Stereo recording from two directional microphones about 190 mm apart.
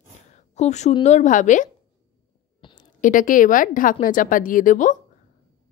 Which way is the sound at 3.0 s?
45° left (ahead or behind).